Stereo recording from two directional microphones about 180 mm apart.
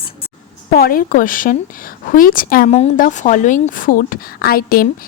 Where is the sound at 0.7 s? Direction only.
55° left (ahead or behind).